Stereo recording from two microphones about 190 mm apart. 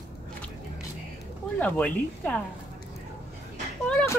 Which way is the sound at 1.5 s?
10° left (ahead or behind).